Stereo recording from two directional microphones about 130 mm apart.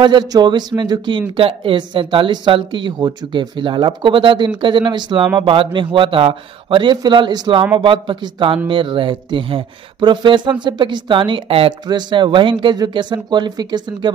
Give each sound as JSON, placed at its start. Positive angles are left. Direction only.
{"t": 0.0, "sound": "speech", "side_deg": -35}